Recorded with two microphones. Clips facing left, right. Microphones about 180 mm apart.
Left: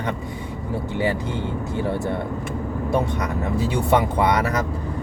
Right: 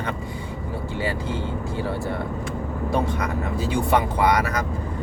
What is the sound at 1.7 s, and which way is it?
Speech, 25° left (ahead or behind).